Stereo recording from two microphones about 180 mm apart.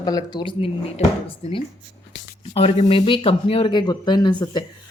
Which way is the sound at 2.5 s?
30° left (ahead or behind).